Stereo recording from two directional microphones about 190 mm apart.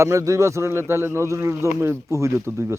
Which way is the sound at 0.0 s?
15° right (ahead or behind).